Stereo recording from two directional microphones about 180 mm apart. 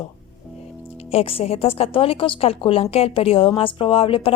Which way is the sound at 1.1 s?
35° left (ahead or behind).